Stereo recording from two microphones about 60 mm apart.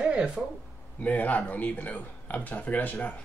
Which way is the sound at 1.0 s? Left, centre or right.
Left.